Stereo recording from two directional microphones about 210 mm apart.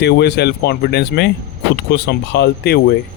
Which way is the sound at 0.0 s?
50° left (ahead or behind).